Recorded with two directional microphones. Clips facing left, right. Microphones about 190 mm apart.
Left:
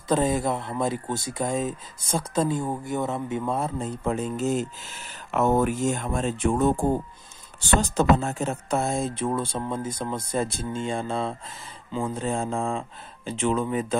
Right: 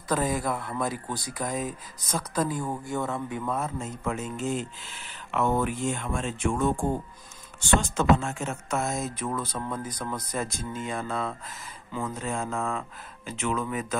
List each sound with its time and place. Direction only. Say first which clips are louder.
0.1 s speech: left 4 dB; 25° left (ahead or behind)